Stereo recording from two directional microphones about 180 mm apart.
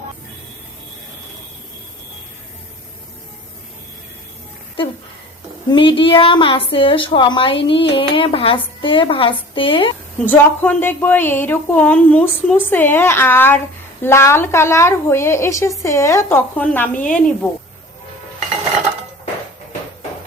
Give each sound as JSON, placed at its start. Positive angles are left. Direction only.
{"t": 5.7, "sound": "a woman's voice", "side_deg": 30}
{"t": 10.2, "sound": "a woman's voice", "side_deg": 10}